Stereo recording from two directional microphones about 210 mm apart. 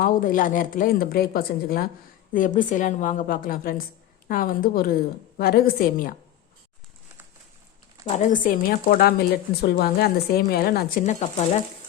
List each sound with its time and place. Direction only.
0.0 s a woman's voice: 40° left (ahead or behind)
8.0 s speech: 35° left (ahead or behind)